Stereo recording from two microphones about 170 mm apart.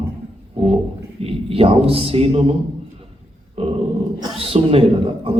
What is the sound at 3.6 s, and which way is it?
Dog, 35° right (ahead or behind).